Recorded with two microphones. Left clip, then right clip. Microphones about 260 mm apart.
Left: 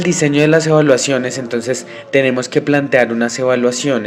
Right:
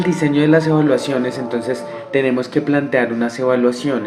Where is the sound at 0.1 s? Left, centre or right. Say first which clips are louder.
Left 2 dB; left.